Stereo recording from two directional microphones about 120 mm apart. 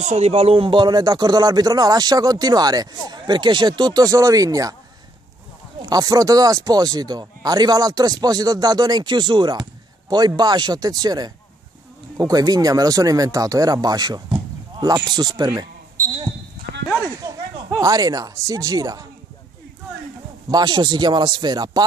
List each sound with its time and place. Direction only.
0.0 s speech: 65° right (ahead or behind); by 4.7 s 30° right (ahead or behind)
5.8 s speech: 35° right (ahead or behind)
17.2 s speech: 30° right (ahead or behind)
20.4 s speech: 35° right (ahead or behind)